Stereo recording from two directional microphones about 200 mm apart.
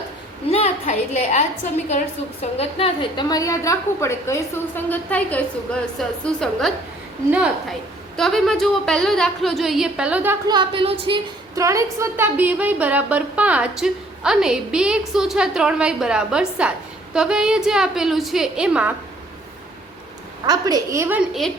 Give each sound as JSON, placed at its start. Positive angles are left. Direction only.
{"t": 0.5, "sound": "a woman's voice", "side_deg": 35}
{"t": 10.5, "sound": "a woman's voice", "side_deg": -25}
{"t": 20.5, "sound": "a woman's voice", "side_deg": -20}